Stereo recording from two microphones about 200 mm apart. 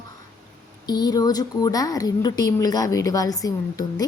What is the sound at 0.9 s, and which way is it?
A woman's voice, 20° left (ahead or behind).